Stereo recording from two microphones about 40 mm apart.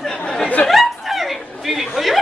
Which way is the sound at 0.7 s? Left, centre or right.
Centre.